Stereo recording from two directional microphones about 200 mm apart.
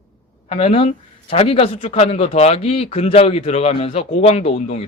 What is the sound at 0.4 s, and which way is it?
Speech, 35° left (ahead or behind).